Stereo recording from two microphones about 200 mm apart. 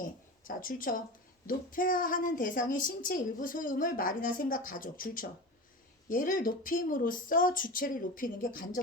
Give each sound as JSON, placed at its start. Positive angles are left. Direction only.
{"t": 0.0, "sound": "a woman's voice", "side_deg": 40}